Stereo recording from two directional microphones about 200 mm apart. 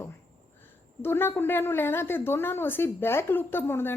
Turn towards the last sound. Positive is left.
turn(degrees=10)  # may be behind; listen again after turning